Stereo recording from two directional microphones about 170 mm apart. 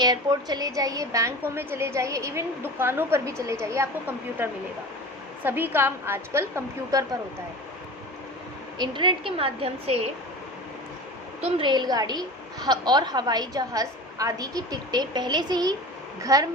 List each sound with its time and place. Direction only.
0.0 s a woman's voice: 25° right (ahead or behind)
8.8 s a woman's voice: 30° right (ahead or behind)
11.4 s a woman's voice: 30° right (ahead or behind)